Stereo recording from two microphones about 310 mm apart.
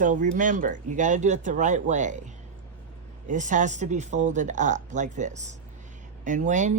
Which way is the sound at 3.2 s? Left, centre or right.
Right.